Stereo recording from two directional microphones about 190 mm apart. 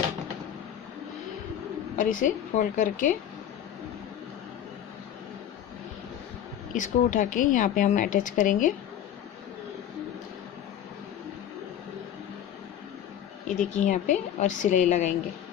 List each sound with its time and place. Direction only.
2.0 s a woman's voice: 45° left (ahead or behind)
6.7 s a woman's voice: 40° left (ahead or behind)
13.8 s a woman's voice: 40° left (ahead or behind)